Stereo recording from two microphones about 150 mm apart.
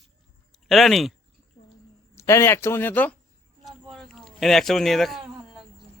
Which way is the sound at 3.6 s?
Centre (ahead or behind).